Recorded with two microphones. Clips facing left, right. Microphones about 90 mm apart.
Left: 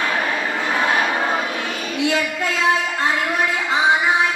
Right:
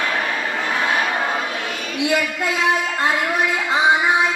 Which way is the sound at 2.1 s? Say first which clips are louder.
Right 1 dB; 15° right (ahead or behind).